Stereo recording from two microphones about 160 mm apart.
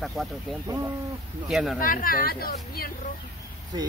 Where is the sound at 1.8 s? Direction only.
60° left (ahead or behind).